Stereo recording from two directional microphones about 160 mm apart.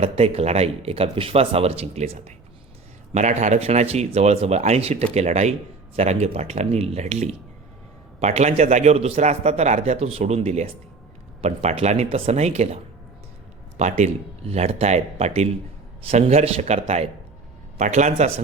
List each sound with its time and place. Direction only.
0.0 s speech: 40° right (ahead or behind)